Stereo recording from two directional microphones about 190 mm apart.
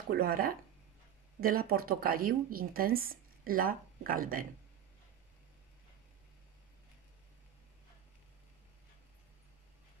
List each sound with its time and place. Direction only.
0.1 s speech: 50° right (ahead or behind)